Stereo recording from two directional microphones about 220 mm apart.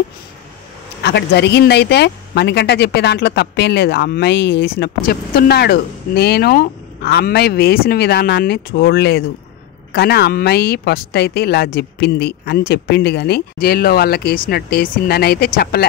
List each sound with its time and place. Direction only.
1.0 s a woman's voice: 50° left (ahead or behind)